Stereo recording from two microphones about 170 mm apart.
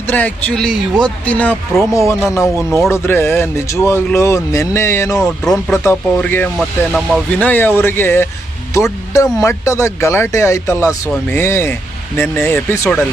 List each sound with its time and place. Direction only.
0.1 s speech: 10° left (ahead or behind)
1.9 s speech: 15° left (ahead or behind)
5.5 s speech: centre (ahead or behind)
5.8 s speech: 10° left (ahead or behind)